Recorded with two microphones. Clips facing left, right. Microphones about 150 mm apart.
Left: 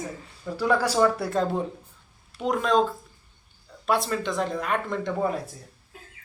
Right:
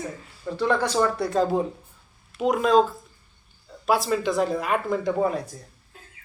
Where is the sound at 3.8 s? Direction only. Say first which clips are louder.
Right 3 dB; 5° right (ahead or behind).